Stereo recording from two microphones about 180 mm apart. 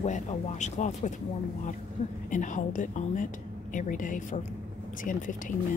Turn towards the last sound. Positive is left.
turn(degrees=45)  # may be behind; listen again after turning